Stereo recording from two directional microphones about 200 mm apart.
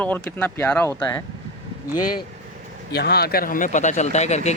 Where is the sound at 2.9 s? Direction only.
55° left (ahead or behind); by 4.5 s 35° left (ahead or behind).